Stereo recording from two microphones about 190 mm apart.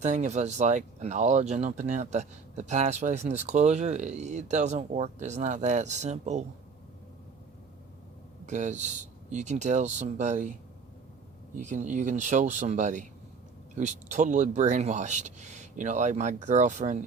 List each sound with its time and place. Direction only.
0.0 s speech: 35° right (ahead or behind)
8.4 s speech: 40° right (ahead or behind)
11.5 s speech: 40° right (ahead or behind)